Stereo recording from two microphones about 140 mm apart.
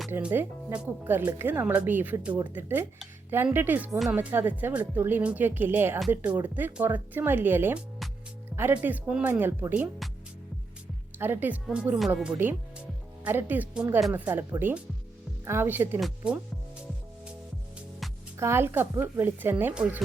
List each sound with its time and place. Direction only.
0.1 s speech: 15° right (ahead or behind)
3.9 s speech: centre (ahead or behind)
4.2 s speech: 15° right (ahead or behind)
11.2 s speech: 15° right (ahead or behind)
15.4 s speech: 15° right (ahead or behind)
16.0 s speech: 5° right (ahead or behind)
18.3 s speech: 20° right (ahead or behind)